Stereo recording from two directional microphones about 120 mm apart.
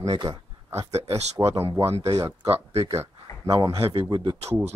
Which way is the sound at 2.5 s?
55° right (ahead or behind).